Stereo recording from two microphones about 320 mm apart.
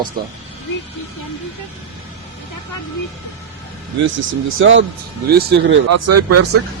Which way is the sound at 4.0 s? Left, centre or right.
Right.